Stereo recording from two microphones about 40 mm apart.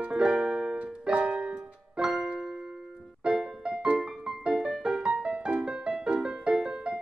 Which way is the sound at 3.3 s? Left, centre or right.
Centre.